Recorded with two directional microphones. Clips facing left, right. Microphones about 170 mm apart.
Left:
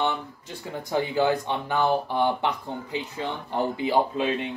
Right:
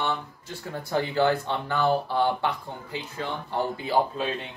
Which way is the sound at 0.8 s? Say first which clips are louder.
Even; 15° left (ahead or behind).